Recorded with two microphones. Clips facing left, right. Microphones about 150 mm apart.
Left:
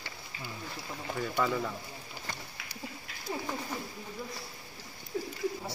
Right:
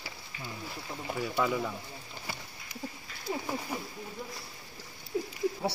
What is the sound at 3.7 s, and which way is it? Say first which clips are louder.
Speech: right 1 dB; 10° right (ahead or behind).